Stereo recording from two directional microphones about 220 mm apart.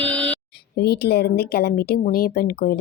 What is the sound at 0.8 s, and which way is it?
Speech, 50° left (ahead or behind).